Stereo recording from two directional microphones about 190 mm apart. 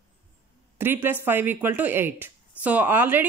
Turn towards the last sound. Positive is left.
turn(degrees=-10)  # may be behind; listen again after turning